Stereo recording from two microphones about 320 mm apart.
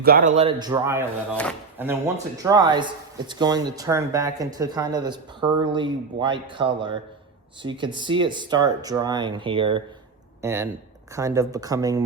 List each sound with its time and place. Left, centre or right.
0.0 s speech: right; by 1.0 s centre
1.4 s speech: centre
2.4 s speech: centre